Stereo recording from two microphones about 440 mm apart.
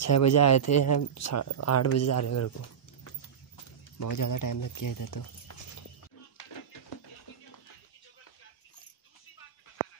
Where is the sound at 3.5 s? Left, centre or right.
Left.